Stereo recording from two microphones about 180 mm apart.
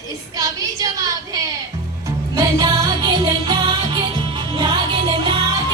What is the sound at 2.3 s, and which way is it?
Music, 20° right (ahead or behind).